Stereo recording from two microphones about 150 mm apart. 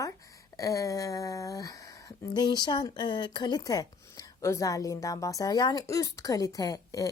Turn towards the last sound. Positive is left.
turn(degrees=25)  # may be behind; listen again after turning